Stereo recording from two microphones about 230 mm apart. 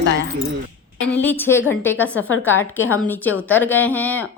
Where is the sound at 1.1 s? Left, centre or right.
Centre.